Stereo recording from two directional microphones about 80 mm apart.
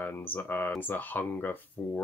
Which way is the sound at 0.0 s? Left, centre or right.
Left.